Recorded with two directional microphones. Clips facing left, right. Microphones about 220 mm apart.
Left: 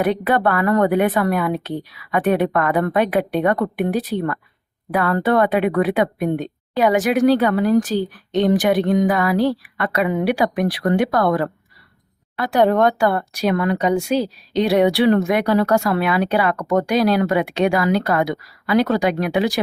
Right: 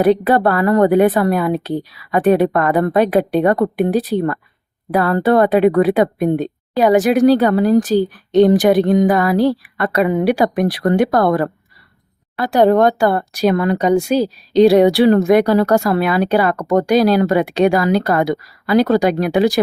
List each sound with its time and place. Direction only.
0.0 s speech: 35° right (ahead or behind)